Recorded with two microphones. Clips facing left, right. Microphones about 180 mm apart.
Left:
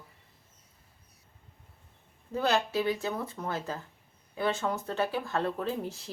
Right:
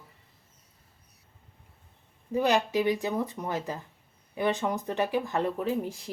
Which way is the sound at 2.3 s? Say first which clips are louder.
Right 3 dB; 15° right (ahead or behind).